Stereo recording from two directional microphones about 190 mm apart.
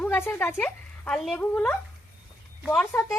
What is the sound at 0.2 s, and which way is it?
Speech, 10° left (ahead or behind).